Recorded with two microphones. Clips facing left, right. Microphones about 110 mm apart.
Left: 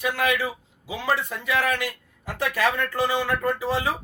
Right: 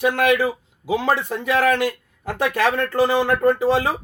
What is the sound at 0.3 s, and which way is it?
Speech, 35° right (ahead or behind).